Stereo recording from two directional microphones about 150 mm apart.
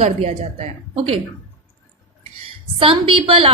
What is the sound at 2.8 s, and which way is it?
Speech, 35° right (ahead or behind).